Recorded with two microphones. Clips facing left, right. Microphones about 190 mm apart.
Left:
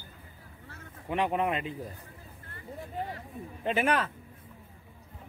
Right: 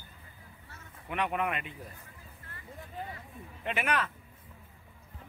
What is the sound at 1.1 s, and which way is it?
Speech, 30° left (ahead or behind).